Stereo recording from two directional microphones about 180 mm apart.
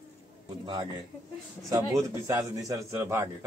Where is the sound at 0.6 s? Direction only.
25° right (ahead or behind).